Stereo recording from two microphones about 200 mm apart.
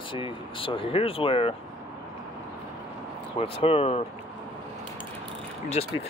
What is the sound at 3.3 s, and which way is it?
Speech, 30° left (ahead or behind).